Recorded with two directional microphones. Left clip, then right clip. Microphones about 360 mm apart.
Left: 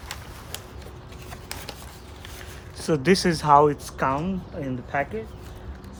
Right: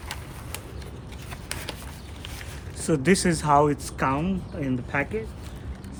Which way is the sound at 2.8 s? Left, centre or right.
Centre.